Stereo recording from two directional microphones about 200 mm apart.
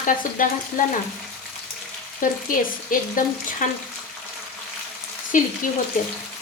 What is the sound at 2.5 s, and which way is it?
Frying, 45° left (ahead or behind).